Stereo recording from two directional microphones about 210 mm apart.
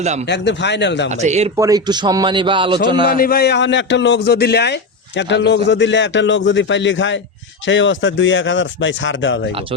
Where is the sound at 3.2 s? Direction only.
45° left (ahead or behind); by 9.5 s 60° left (ahead or behind).